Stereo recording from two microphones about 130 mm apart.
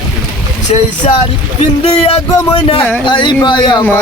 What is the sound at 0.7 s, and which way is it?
Speech, 55° left (ahead or behind).